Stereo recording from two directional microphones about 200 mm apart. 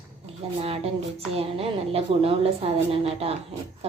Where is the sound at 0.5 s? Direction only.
30° right (ahead or behind).